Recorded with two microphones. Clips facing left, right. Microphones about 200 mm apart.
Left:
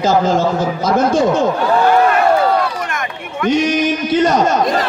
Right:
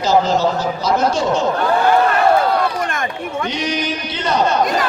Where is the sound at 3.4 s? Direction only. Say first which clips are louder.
Left 9 dB; 45° left (ahead or behind).